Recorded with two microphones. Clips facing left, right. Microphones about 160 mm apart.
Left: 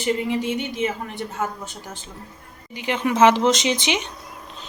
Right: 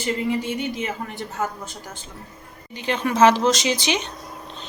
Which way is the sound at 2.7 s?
15° left (ahead or behind).